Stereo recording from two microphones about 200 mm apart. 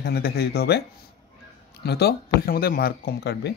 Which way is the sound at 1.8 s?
55° left (ahead or behind).